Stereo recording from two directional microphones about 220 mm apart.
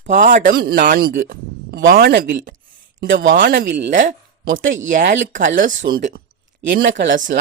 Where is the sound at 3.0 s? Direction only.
50° right (ahead or behind).